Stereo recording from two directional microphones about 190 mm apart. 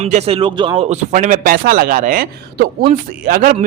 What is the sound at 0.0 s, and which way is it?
A man's voice, 35° right (ahead or behind).